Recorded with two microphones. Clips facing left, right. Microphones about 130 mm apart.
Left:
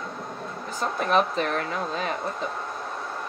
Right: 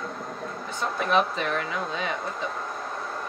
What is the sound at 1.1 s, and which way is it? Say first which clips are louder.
Speech: left 1 dB; 35° left (ahead or behind).